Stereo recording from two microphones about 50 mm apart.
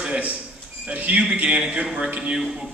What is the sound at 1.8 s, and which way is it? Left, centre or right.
Speech, centre.